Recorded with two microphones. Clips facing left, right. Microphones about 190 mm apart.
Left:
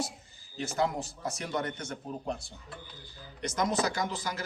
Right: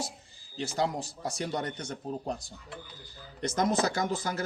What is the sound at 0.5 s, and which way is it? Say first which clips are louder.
A man's voice: even; 30° right (ahead or behind).